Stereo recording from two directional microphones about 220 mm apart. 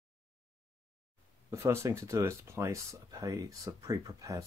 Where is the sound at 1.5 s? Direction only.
10° right (ahead or behind).